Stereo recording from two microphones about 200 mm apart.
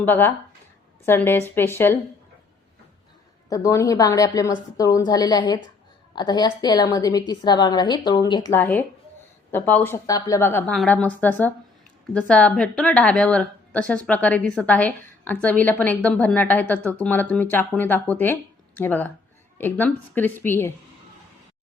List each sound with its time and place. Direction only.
0.0 s a woman's voice: 10° left (ahead or behind)
3.5 s a woman's voice: 15° left (ahead or behind)